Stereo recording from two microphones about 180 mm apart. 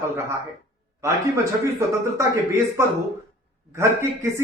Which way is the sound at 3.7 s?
15° right (ahead or behind).